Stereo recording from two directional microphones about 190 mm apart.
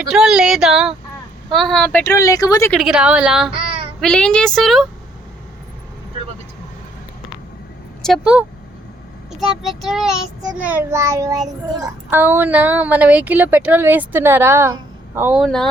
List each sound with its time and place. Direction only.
0.1 s a woman's voice: 5° right (ahead or behind); by 2.7 s 15° left (ahead or behind)
2.7 s a woman's voice: 5° right (ahead or behind)
3.5 s child singing: 30° right (ahead or behind)
4.0 s a woman's voice: 5° left (ahead or behind)
8.0 s a woman's voice: centre (ahead or behind)
9.4 s child singing: centre (ahead or behind)